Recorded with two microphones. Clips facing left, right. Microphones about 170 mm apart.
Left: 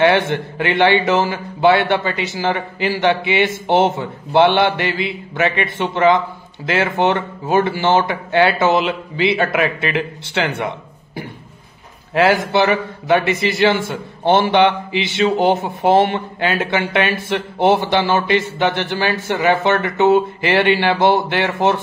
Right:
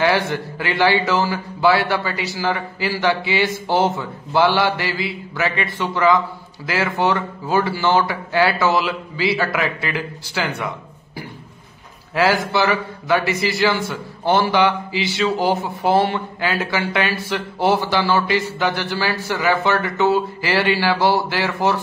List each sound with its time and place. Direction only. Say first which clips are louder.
0.0 s a man's voice: left 4 dB; 20° left (ahead or behind)
12.1 s a man's voice: left 3 dB; 25° left (ahead or behind)